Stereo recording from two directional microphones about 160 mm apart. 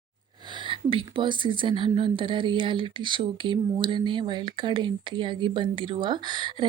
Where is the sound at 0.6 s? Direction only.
30° right (ahead or behind).